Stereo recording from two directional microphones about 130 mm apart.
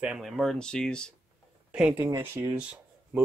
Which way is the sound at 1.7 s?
10° right (ahead or behind).